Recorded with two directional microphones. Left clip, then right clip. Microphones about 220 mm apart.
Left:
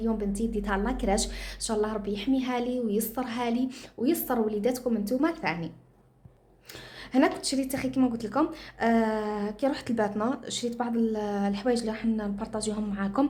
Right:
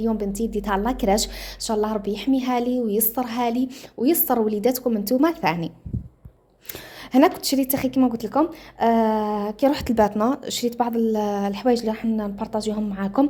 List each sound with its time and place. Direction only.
0.0 s a woman's voice: 25° right (ahead or behind)
7.1 s a woman's voice: 30° right (ahead or behind)